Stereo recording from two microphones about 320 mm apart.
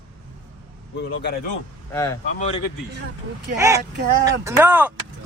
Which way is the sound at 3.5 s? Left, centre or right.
Centre.